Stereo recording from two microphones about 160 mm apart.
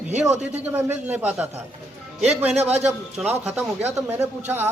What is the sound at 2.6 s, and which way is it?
Speech, 40° right (ahead or behind).